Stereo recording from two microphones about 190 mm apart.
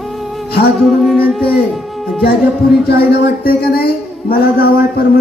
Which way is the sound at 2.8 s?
55° left (ahead or behind).